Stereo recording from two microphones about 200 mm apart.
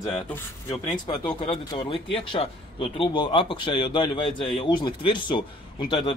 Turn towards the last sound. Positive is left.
turn(degrees=25)  # may be behind; listen again after turning